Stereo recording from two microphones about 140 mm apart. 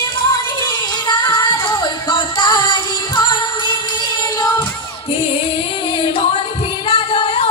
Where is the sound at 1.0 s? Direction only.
30° left (ahead or behind).